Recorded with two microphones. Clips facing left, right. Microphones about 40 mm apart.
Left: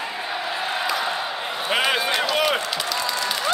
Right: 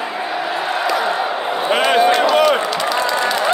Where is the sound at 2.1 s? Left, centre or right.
Centre.